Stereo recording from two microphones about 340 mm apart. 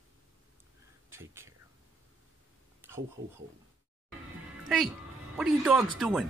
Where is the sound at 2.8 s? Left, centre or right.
Centre.